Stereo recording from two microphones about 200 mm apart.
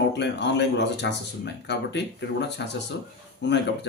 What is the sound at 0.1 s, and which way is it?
Speech, 60° left (ahead or behind).